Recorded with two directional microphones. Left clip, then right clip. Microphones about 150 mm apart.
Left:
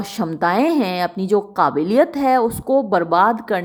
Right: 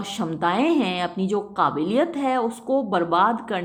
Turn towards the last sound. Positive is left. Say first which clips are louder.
# left 5 dB
turn(degrees=30)  # may be behind; listen again after turning